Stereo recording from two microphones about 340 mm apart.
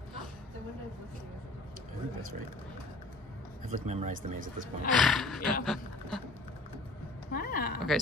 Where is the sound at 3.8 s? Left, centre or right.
Right.